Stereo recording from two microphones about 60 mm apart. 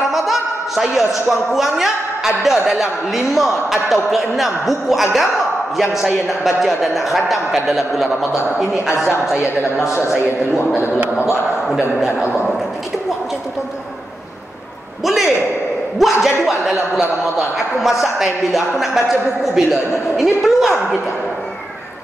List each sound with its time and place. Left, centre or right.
0.1 s a man's voice: centre
11.1 s a man's voice: left
15.0 s a man's voice: centre